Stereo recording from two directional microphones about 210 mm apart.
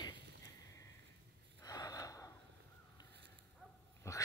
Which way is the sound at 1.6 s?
15° left (ahead or behind).